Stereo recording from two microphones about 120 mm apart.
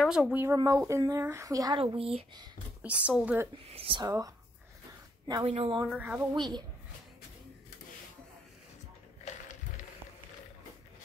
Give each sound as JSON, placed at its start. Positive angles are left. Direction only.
{"t": 0.0, "sound": "speech", "side_deg": -10}
{"t": 0.6, "sound": "speech", "side_deg": -30}
{"t": 2.0, "sound": "a woman's voice", "side_deg": -50}
{"t": 2.8, "sound": "speech", "side_deg": -10}
{"t": 3.5, "sound": "speech", "side_deg": -50}
{"t": 4.0, "sound": "speech", "side_deg": -30}
{"t": 5.4, "sound": "a woman's voice", "side_deg": -50}
{"t": 5.9, "sound": "speech", "side_deg": -15}
{"t": 6.3, "sound": "a woman's voice", "side_deg": -35}
{"t": 9.2, "sound": "a sound", "side_deg": 90}